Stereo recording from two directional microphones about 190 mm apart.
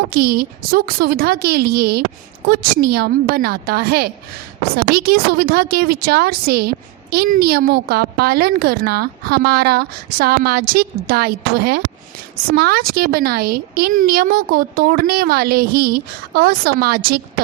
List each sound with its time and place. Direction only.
0.1 s a woman's voice: 55° right (ahead or behind)